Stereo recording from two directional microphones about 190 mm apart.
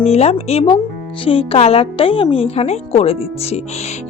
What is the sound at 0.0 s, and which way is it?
Speech, 35° left (ahead or behind).